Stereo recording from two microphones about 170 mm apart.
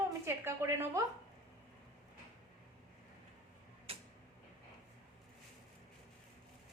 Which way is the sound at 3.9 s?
35° right (ahead or behind).